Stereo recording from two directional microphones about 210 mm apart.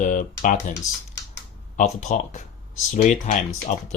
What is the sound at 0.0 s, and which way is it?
Speech, 40° left (ahead or behind).